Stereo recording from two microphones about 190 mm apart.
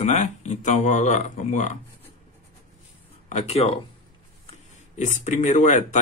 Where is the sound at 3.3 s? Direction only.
35° left (ahead or behind).